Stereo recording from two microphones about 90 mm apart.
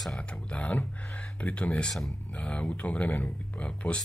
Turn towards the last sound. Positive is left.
turn(degrees=15)  # may be behind; listen again after turning